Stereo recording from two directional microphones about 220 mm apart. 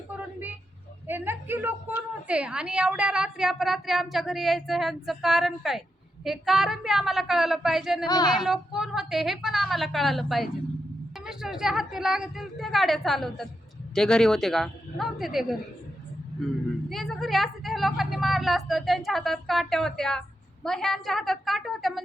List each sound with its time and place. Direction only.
1.0 s a sound: 10° right (ahead or behind)
2.2 s a woman's voice: 5° right (ahead or behind)
8.0 s a woman's voice: 20° left (ahead or behind)
8.4 s a woman's voice: centre (ahead or behind)
16.9 s a woman's voice: centre (ahead or behind)